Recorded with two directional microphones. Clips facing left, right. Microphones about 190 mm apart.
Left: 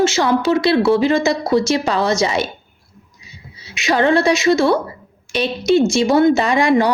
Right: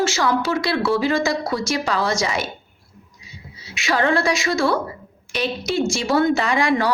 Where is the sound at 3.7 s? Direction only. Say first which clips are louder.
Left 5 dB; 20° left (ahead or behind).